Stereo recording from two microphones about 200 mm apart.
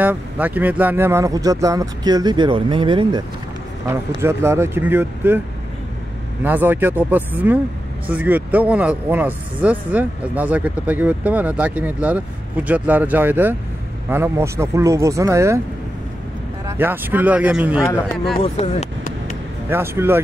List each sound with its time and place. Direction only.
0.0 s speech: 10° right (ahead or behind)
4.1 s speech: 10° right (ahead or behind)
6.4 s speech: 10° right (ahead or behind)
16.6 s speech: 10° right (ahead or behind)
18.4 s speech: 30° left (ahead or behind)
19.7 s speech: 10° right (ahead or behind)